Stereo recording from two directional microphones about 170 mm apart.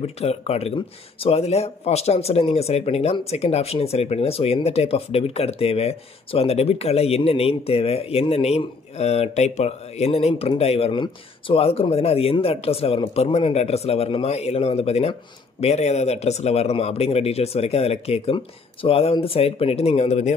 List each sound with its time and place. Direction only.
0.0 s speech: 35° left (ahead or behind)